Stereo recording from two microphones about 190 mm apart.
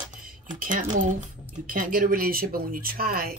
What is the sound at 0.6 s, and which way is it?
Speech, 45° right (ahead or behind).